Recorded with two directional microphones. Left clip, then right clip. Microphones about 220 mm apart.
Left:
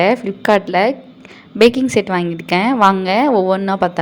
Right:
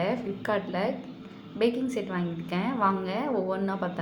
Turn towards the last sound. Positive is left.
turn(degrees=40)  # may be behind; listen again after turning